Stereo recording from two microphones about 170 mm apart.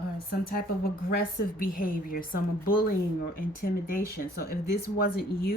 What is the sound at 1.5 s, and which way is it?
Speech, 60° left (ahead or behind).